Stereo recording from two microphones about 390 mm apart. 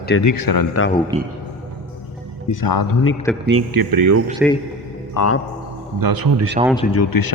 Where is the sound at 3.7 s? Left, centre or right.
Right.